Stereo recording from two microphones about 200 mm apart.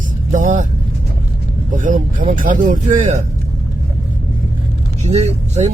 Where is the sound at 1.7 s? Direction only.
40° right (ahead or behind).